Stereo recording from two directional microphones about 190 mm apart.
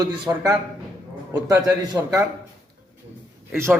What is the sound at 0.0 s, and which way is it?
A man's voice, 20° right (ahead or behind).